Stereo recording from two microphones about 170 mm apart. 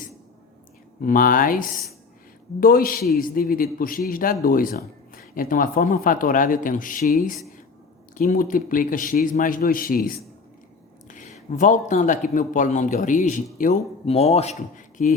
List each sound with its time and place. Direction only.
1.0 s a man's voice: 55° left (ahead or behind)
11.1 s speech: 45° left (ahead or behind)
14.0 s speech: 35° left (ahead or behind)